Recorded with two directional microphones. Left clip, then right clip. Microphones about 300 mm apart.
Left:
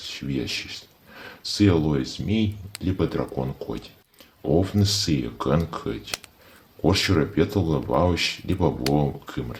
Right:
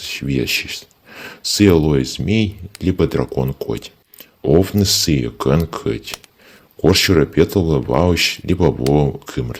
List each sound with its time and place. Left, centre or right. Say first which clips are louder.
0.0 s speech: right 9 dB; right